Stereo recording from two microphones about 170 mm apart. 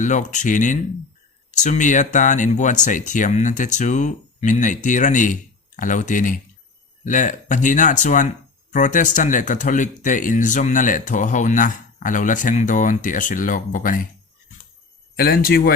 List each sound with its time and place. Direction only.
0.0 s speech: 45° left (ahead or behind)
15.1 s speech: 65° left (ahead or behind)